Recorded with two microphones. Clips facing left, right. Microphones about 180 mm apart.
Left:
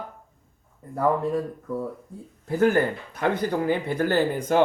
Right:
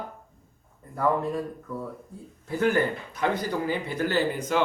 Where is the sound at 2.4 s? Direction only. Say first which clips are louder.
Left 3 dB; 45° left (ahead or behind).